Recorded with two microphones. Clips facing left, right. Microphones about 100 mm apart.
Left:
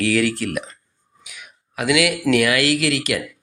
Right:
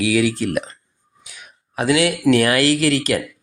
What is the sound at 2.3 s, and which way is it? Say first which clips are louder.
Speech: right 2 dB; 35° right (ahead or behind).